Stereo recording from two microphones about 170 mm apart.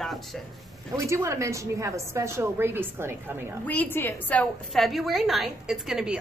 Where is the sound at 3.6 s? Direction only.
10° left (ahead or behind).